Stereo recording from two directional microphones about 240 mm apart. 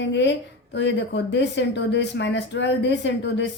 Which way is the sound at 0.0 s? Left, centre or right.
Left.